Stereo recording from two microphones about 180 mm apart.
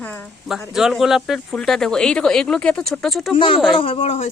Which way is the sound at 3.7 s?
30° left (ahead or behind).